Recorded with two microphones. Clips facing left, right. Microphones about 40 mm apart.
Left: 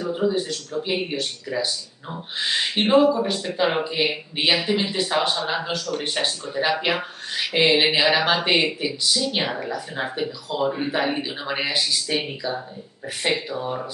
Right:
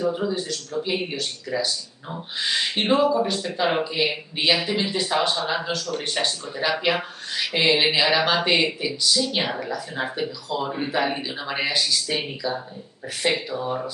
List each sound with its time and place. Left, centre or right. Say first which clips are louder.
0.0 s speech: left 1 dB; centre
4.6 s speech: left 1 dB; centre
9.6 s speech: even; centre
9.9 s speech: even; centre